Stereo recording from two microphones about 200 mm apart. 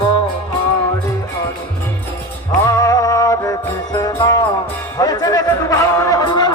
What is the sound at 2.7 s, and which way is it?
Music, 15° left (ahead or behind).